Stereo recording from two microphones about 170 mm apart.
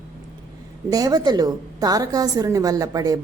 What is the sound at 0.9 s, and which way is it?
A woman's voice, 20° right (ahead or behind).